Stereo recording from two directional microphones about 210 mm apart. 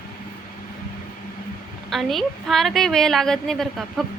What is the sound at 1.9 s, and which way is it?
A woman's voice, centre (ahead or behind).